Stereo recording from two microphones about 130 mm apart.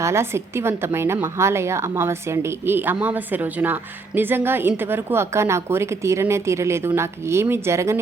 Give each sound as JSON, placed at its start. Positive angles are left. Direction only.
{"t": 0.0, "sound": "a woman's voice", "side_deg": -20}